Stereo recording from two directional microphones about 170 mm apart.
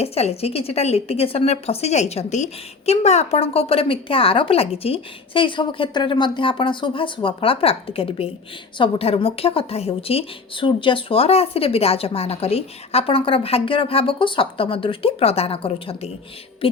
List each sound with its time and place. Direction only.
0.0 s a woman's voice: 35° left (ahead or behind)